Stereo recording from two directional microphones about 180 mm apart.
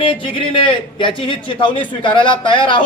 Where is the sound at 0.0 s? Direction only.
30° left (ahead or behind).